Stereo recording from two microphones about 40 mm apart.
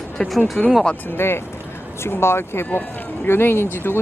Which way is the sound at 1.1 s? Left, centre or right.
Left.